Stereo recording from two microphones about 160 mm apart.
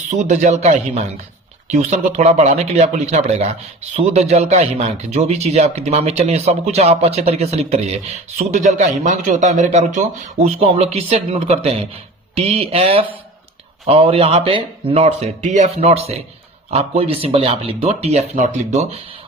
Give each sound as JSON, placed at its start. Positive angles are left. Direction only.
{"t": 0.1, "sound": "speech", "side_deg": -50}